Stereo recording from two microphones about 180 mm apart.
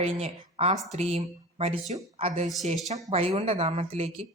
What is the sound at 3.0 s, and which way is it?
Speech, 35° right (ahead or behind).